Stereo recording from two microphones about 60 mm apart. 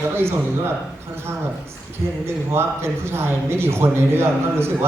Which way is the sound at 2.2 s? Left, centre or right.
Right.